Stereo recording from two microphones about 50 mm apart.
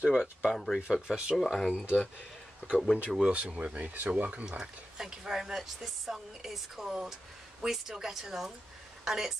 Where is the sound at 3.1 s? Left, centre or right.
Centre.